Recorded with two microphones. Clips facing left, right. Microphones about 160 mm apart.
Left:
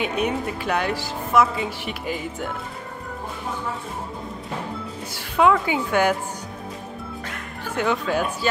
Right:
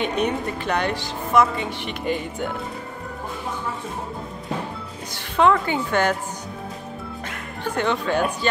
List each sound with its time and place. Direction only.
0.0 s a woman's voice: 5° left (ahead or behind)
5.1 s a woman's voice: 5° left (ahead or behind)
7.7 s a woman's voice: 5° left (ahead or behind)